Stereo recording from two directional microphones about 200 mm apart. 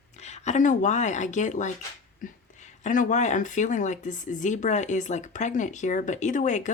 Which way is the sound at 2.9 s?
40° left (ahead or behind).